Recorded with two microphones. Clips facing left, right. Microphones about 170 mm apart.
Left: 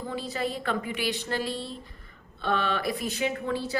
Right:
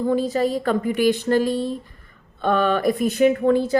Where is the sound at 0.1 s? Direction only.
45° right (ahead or behind).